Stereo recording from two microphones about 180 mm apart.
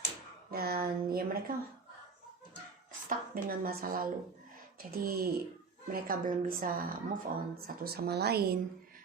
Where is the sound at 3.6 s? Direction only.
55° right (ahead or behind).